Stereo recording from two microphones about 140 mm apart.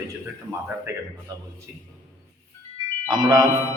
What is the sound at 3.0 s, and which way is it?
Speech, 30° right (ahead or behind).